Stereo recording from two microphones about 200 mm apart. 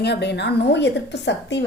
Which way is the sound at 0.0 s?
55° left (ahead or behind).